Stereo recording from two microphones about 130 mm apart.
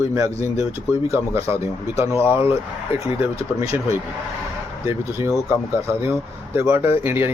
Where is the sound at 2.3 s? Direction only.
45° left (ahead or behind).